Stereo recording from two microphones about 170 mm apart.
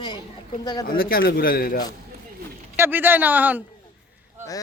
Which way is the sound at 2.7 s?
15° right (ahead or behind).